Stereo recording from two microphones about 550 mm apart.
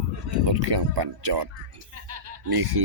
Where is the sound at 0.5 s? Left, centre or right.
Right.